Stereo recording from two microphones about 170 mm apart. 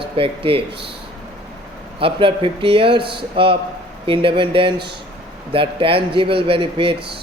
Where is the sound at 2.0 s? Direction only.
30° right (ahead or behind).